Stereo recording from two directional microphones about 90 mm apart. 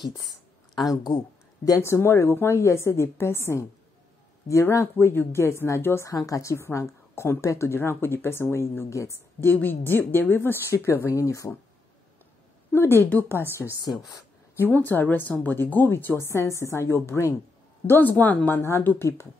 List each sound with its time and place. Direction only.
1.0 s speech: 45° left (ahead or behind)
1.8 s a woman's voice: 30° left (ahead or behind)
6.0 s a woman's voice: 40° left (ahead or behind)
12.7 s a woman's voice: 25° left (ahead or behind)
13.6 s speech: centre (ahead or behind)
14.6 s a woman's voice: 20° left (ahead or behind)